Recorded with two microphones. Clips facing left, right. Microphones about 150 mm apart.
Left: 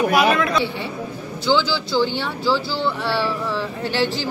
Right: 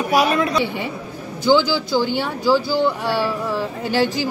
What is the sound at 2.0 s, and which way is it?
Speech, 10° right (ahead or behind).